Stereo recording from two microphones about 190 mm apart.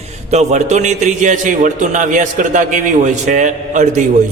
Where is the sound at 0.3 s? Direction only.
35° right (ahead or behind).